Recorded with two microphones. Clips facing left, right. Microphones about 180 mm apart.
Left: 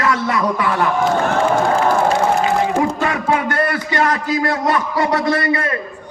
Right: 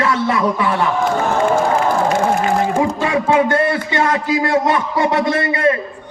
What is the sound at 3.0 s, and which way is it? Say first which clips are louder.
A man's voice: right 3 dB; 25° right (ahead or behind).